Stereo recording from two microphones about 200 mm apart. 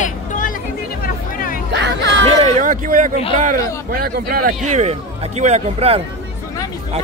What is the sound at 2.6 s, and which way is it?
Speech, 40° right (ahead or behind).